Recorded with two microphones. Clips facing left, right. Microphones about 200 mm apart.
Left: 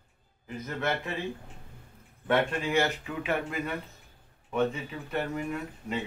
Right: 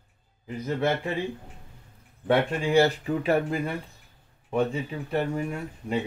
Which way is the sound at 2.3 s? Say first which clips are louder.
Right 4 dB; 35° right (ahead or behind).